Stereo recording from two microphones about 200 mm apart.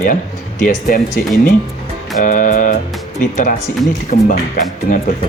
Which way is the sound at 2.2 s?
40° left (ahead or behind).